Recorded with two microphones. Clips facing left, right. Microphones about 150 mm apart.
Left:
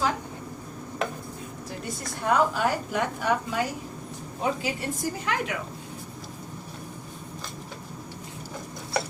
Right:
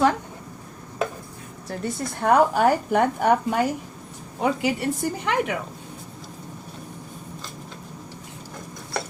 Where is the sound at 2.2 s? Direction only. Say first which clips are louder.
Right 6 dB; 55° right (ahead or behind).